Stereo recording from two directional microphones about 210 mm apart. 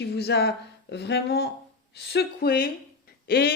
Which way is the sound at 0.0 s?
50° left (ahead or behind).